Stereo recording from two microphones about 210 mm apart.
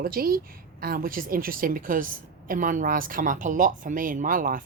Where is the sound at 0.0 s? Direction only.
45° right (ahead or behind).